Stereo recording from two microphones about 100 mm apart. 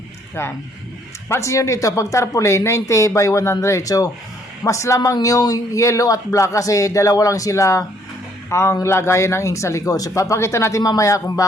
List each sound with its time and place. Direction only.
1.3 s speech: 30° left (ahead or behind)